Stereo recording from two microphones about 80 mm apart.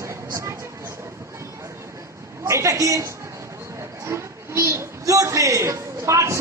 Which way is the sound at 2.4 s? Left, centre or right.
Right.